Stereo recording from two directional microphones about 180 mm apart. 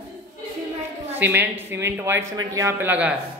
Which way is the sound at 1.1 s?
10° right (ahead or behind).